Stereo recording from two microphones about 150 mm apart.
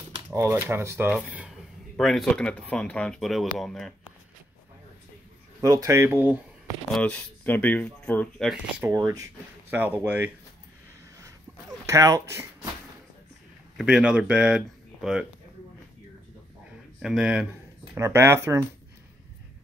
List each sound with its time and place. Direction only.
0.3 s speech: 15° right (ahead or behind); by 3.9 s centre (ahead or behind)
5.6 s speech: 20° right (ahead or behind)
6.9 s speech: 10° left (ahead or behind)
8.8 s speech: 20° right (ahead or behind)
11.8 s speech: 20° right (ahead or behind)
13.7 s speech: 5° right (ahead or behind)
17.0 s speech: 5° right (ahead or behind)
17.9 s speech: 20° right (ahead or behind)